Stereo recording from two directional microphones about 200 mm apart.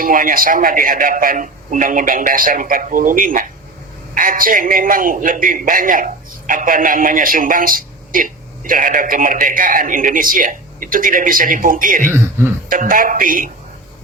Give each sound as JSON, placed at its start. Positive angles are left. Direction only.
{"t": 0.0, "sound": "a man's voice", "side_deg": -45}